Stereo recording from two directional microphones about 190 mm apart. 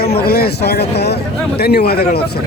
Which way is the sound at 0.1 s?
55° left (ahead or behind).